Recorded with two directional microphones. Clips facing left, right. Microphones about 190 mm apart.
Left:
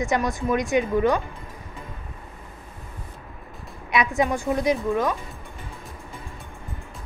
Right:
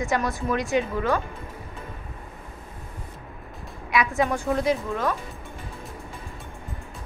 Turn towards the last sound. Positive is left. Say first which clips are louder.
# left 2 dB
turn(degrees=15)  # may be behind; listen again after turning